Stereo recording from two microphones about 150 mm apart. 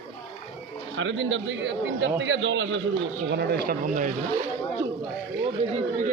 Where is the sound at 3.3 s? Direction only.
90° right.